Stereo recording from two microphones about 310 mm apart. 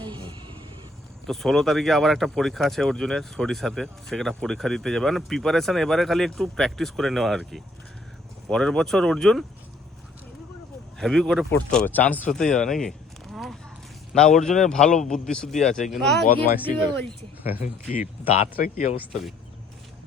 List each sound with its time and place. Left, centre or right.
0.0 s a sound: centre
1.3 s speech: centre
10.9 s speech: centre
13.3 s walk: centre
14.1 s speech: centre
18.5 s speech: left